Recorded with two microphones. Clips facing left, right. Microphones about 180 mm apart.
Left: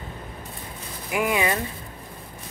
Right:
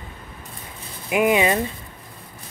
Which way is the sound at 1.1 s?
20° right (ahead or behind).